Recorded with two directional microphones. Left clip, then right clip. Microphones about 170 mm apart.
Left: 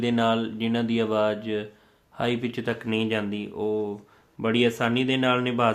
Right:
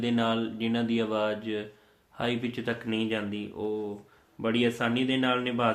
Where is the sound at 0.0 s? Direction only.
35° left (ahead or behind).